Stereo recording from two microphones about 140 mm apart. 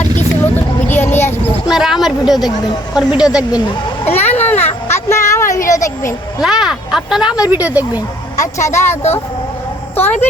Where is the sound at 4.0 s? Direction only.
15° left (ahead or behind).